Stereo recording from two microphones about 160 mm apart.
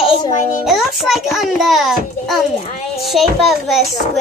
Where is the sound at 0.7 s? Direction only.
Centre (ahead or behind).